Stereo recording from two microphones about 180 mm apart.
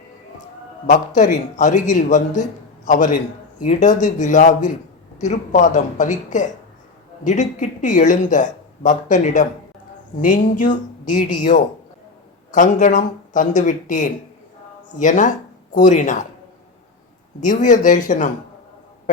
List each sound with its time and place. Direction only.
0.9 s speech: 45° left (ahead or behind)
12.5 s speech: 45° left (ahead or behind)
17.4 s speech: 45° left (ahead or behind)